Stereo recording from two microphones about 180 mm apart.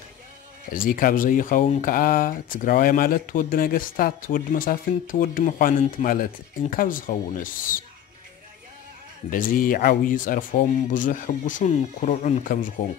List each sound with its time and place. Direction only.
0.7 s speech: 50° left (ahead or behind)
9.3 s speech: 50° left (ahead or behind)